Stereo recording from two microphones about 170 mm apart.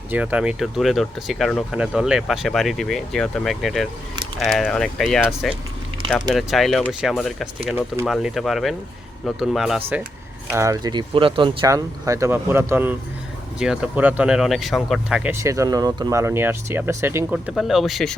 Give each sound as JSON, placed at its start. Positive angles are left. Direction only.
{"t": 0.1, "sound": "speech", "side_deg": -10}
{"t": 10.5, "sound": "speech", "side_deg": -15}
{"t": 11.6, "sound": "speech", "side_deg": -20}